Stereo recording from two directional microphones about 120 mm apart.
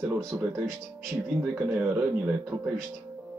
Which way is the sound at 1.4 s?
10° right (ahead or behind).